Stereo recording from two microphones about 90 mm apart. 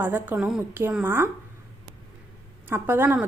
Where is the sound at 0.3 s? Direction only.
5° right (ahead or behind).